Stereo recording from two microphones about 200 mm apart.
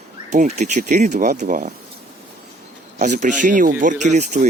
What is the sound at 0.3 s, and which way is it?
Speech, 35° right (ahead or behind).